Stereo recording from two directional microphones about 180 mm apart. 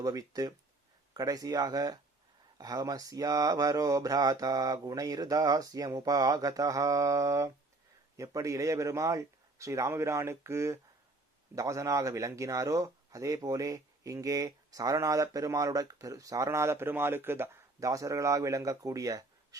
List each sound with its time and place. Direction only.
0.0 s speech: 20° right (ahead or behind)